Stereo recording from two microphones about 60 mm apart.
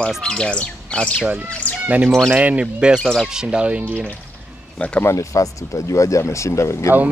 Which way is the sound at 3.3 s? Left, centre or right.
Centre.